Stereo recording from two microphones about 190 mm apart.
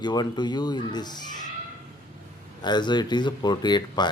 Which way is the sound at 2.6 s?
25° left (ahead or behind).